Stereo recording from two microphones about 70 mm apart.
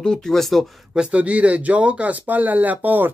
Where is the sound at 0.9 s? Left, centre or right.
Centre.